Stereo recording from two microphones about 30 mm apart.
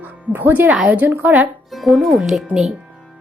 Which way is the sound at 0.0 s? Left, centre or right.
Right.